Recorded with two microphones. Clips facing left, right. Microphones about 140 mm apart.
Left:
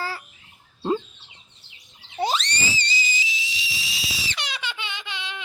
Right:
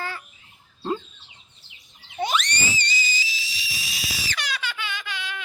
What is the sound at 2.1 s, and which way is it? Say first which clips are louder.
Screaming: left 1 dB; 30° left (ahead or behind).